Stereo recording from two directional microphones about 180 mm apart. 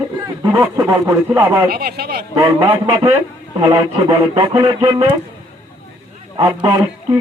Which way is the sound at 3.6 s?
25° right (ahead or behind).